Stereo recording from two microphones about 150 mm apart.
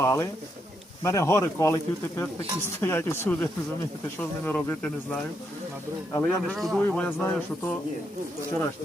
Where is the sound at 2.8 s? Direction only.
15° left (ahead or behind).